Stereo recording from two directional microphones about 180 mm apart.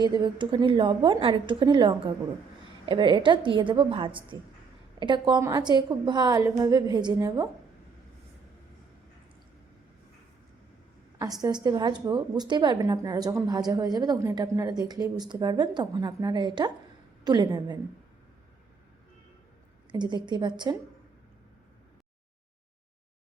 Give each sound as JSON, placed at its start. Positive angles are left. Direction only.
{"t": 0.0, "sound": "a woman's voice", "side_deg": -25}
{"t": 11.2, "sound": "a woman's voice", "side_deg": -20}
{"t": 19.9, "sound": "a woman's voice", "side_deg": -25}